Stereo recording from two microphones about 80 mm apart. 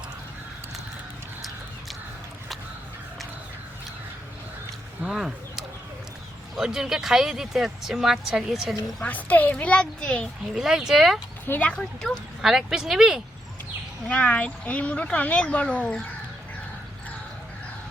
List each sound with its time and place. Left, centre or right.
5.0 s a sound: centre
6.6 s speech: centre
9.0 s speech: centre
10.5 s speech: centre
11.4 s speech: left
12.0 s speech: centre
14.1 s speech: centre